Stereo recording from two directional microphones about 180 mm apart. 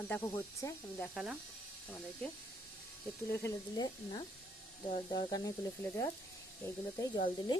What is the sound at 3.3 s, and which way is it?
Speech, 20° left (ahead or behind).